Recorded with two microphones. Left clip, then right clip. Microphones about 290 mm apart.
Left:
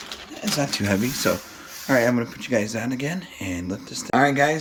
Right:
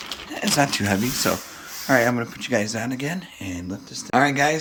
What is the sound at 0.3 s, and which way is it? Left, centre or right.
Speech, centre.